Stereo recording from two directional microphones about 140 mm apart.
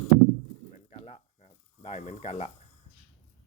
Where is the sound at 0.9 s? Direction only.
50° left (ahead or behind).